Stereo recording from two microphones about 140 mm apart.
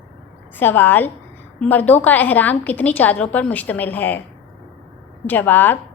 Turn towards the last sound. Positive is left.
turn(degrees=15)  # may be behind; listen again after turning